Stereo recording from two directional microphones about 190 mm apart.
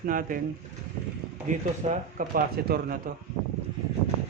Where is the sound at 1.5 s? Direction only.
40° right (ahead or behind).